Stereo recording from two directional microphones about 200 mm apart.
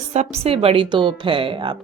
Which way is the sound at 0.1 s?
30° right (ahead or behind).